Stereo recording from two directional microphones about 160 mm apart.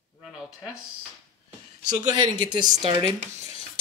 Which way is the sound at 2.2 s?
30° right (ahead or behind).